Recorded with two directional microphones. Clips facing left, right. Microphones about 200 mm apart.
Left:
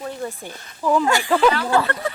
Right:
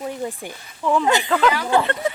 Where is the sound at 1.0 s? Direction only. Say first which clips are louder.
Right 1 dB; 20° right (ahead or behind).